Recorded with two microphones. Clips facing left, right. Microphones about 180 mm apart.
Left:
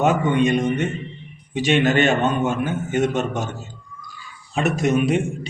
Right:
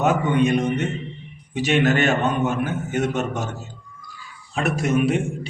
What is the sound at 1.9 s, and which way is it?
A man's voice, 5° right (ahead or behind).